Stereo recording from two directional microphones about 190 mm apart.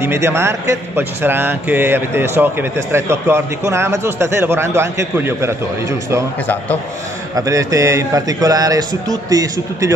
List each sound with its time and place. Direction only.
0.0 s speech: 15° right (ahead or behind)
6.4 s a man's voice: 10° left (ahead or behind)
7.3 s a man's voice: 15° right (ahead or behind)